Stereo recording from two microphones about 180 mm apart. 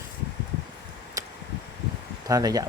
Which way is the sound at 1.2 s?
20° right (ahead or behind).